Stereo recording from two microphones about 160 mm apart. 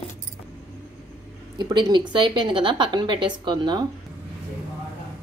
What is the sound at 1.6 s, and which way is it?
A woman's voice, 30° right (ahead or behind).